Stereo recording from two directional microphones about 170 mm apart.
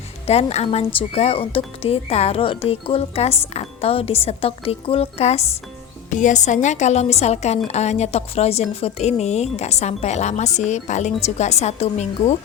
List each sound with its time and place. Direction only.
0.3 s a woman's voice: 40° left (ahead or behind)